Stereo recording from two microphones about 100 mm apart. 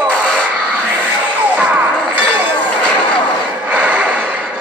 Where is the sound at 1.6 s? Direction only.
15° right (ahead or behind).